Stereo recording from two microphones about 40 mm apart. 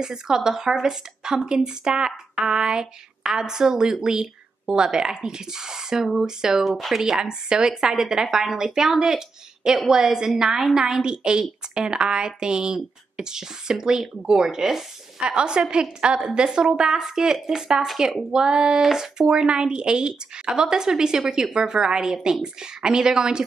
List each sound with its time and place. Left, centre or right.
0.0 s a woman's voice: centre
7.1 s a woman's voice: centre
15.1 s a woman's voice: right